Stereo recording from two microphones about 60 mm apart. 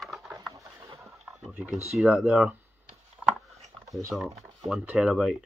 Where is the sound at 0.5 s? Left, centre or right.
Right.